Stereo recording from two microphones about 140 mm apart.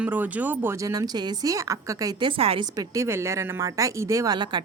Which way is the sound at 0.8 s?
25° right (ahead or behind).